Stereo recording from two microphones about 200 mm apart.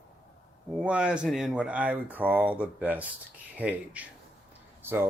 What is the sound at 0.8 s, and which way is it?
Speech, 5° right (ahead or behind).